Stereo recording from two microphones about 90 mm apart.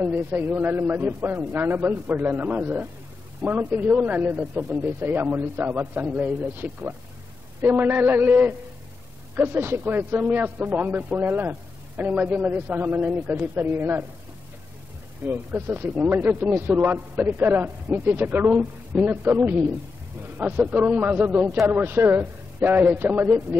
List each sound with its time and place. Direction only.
0.0 s a man's voice: 20° right (ahead or behind)
15.3 s a man's voice: 20° right (ahead or behind)